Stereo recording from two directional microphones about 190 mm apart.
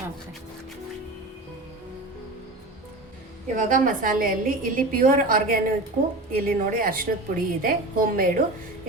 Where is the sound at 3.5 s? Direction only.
45° right (ahead or behind).